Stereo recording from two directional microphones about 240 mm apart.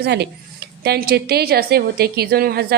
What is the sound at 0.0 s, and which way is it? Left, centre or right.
A woman's voice, right.